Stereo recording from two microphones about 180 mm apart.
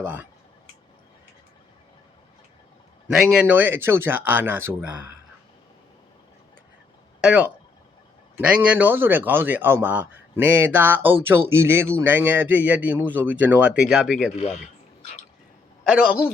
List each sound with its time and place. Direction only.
0.0 s speech: 10° right (ahead or behind)
3.1 s speech: 5° right (ahead or behind)
7.2 s speech: 5° right (ahead or behind)
15.9 s a man's voice: 5° right (ahead or behind)